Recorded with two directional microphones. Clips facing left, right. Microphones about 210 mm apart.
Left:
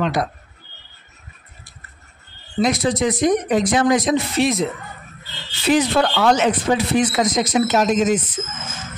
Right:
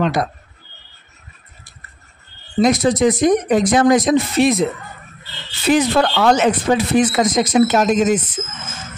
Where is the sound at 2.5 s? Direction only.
45° right (ahead or behind).